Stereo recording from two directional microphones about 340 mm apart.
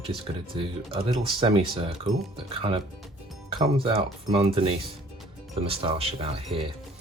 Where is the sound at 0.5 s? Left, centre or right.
Centre.